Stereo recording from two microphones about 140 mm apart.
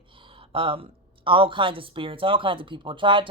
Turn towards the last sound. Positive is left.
turn(degrees=-35)  # may be behind; listen again after turning